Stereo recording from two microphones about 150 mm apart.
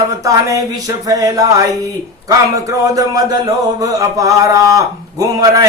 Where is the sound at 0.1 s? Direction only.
20° right (ahead or behind).